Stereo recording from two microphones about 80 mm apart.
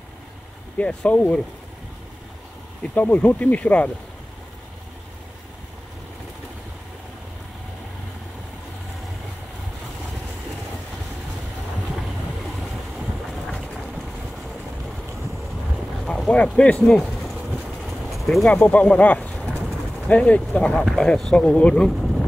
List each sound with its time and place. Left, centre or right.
0.7 s speech: centre
2.8 s speech: centre
16.1 s vehicle: centre
16.4 s speech: centre
16.9 s a sound: centre
17.8 s vehicle: centre
18.5 s speech: centre